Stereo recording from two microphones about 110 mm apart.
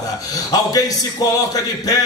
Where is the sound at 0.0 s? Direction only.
35° left (ahead or behind).